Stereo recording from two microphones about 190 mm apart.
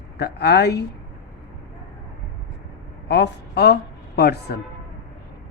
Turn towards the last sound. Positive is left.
turn(degrees=55)  # may be behind; listen again after turning